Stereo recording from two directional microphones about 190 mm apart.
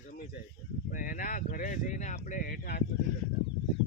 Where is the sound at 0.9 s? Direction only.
45° left (ahead or behind).